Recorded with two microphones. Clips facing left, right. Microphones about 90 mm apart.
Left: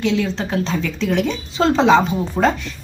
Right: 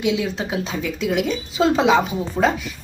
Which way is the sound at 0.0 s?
10° right (ahead or behind).